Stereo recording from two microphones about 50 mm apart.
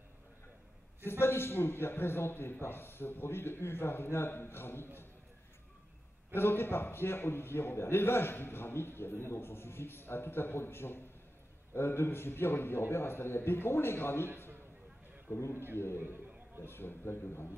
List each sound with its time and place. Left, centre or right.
1.0 s a man's voice: left
6.3 s a man's voice: left